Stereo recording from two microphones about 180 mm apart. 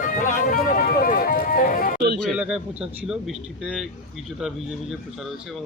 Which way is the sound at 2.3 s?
5° right (ahead or behind).